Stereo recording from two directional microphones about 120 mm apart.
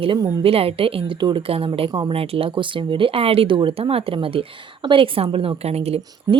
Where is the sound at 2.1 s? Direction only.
50° right (ahead or behind).